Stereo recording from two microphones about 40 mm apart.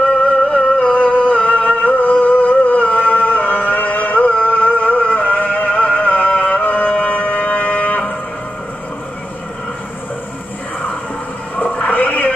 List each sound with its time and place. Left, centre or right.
0.0 s music: left
11.5 s music: left
11.9 s a sound: left